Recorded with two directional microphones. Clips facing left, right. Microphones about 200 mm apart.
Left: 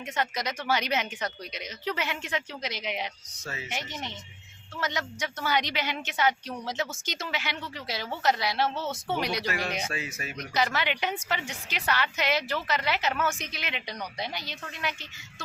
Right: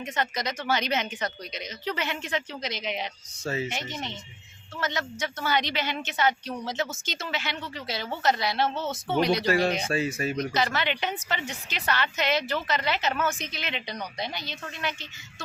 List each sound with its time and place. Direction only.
0.0 s a woman's voice: 10° left (ahead or behind)
3.4 s speech: 30° right (ahead or behind)
3.7 s a woman's voice: 10° left (ahead or behind)
9.5 s speech: 30° right (ahead or behind)
10.5 s a woman's voice: 10° left (ahead or behind)